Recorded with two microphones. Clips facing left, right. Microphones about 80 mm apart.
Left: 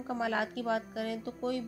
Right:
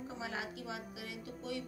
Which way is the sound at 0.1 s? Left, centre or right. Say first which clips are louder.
Left 13 dB; left.